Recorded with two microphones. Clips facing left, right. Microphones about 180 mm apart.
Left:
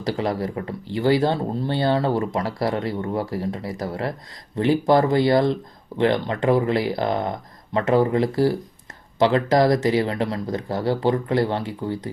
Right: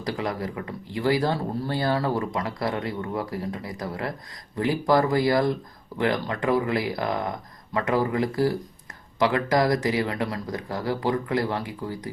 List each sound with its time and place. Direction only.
0.0 s speech: 30° left (ahead or behind)